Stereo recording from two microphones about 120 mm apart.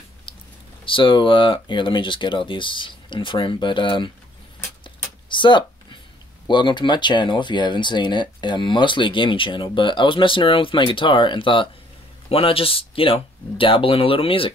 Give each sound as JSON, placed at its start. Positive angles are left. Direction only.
{"t": 0.8, "sound": "speech", "side_deg": 45}
{"t": 4.8, "sound": "a sound", "side_deg": 40}
{"t": 6.4, "sound": "speech", "side_deg": 40}